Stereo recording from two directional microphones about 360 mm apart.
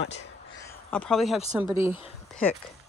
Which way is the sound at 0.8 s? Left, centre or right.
Centre.